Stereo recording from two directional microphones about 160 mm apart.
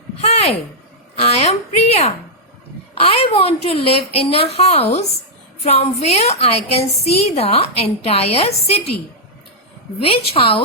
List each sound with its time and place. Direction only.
0.2 s a sound: 40° left (ahead or behind)
3.0 s a woman's voice: 40° left (ahead or behind)
10.3 s a woman's voice: 35° left (ahead or behind)